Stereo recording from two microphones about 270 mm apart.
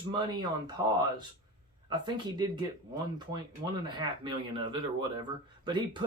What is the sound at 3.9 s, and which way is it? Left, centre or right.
Speech, centre.